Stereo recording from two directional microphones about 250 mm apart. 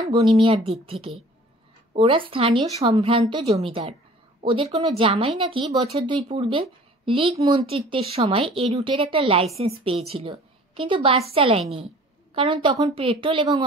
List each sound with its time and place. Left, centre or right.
0.0 s speech: right
2.0 s speech: right